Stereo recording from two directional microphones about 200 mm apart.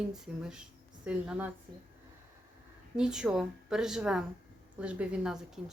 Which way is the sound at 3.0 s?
5° right (ahead or behind).